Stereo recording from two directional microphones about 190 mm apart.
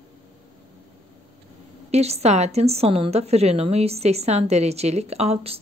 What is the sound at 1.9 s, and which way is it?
A woman's voice, 35° right (ahead or behind).